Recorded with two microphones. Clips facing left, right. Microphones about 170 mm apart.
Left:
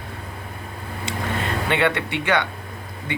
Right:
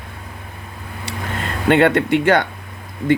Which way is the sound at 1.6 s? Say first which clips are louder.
Right 10 dB; 45° right (ahead or behind).